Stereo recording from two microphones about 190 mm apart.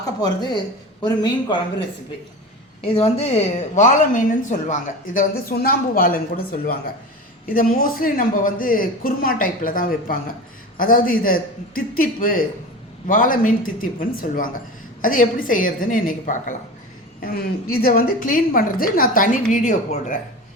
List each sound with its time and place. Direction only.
0.0 s speech: 20° left (ahead or behind)
2.8 s speech: 30° left (ahead or behind)